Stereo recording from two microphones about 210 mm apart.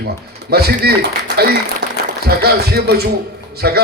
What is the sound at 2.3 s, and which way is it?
A man's voice, 50° right (ahead or behind).